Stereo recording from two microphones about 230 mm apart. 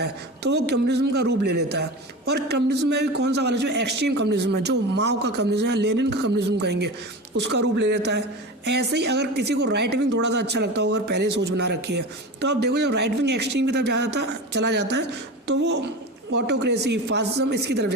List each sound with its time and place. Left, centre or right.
0.0 s speech: right